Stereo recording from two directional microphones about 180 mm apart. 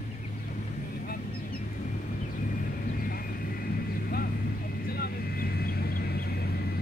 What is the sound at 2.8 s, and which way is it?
Vehicle, 50° left (ahead or behind).